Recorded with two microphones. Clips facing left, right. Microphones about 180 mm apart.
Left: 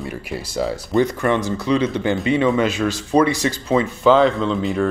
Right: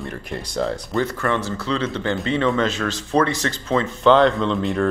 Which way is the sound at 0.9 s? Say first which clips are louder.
Left 6 dB; 15° left (ahead or behind).